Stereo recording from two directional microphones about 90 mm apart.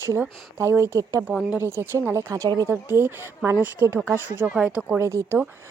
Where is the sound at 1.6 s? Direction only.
25° right (ahead or behind); by 2.7 s 45° right (ahead or behind).